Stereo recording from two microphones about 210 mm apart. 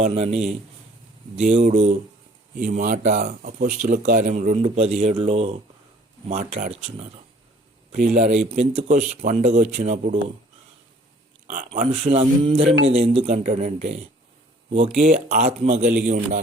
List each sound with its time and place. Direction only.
0.0 s speech: 30° right (ahead or behind)
1.5 s speech: 30° right (ahead or behind)
11.4 s speech: 40° right (ahead or behind)